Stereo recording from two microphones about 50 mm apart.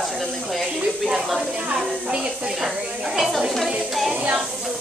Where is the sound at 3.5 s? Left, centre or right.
Centre.